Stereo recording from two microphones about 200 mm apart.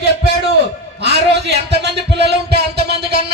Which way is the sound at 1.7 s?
55° right (ahead or behind).